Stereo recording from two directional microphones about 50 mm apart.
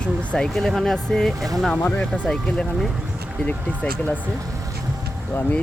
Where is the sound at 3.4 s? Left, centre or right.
Left.